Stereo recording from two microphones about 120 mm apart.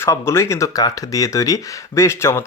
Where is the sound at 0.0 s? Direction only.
25° left (ahead or behind).